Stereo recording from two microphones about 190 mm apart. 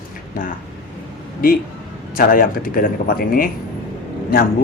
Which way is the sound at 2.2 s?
45° left (ahead or behind).